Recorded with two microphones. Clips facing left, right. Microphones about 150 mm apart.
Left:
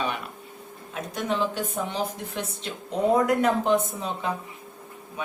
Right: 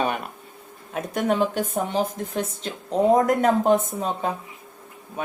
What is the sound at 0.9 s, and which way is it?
A woman's voice, 50° right (ahead or behind).